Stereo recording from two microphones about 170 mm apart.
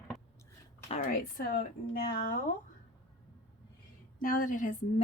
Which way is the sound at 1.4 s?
60° left (ahead or behind).